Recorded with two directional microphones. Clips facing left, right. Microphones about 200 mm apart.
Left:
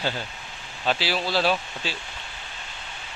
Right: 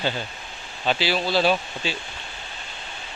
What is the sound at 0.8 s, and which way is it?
Speech, 5° left (ahead or behind).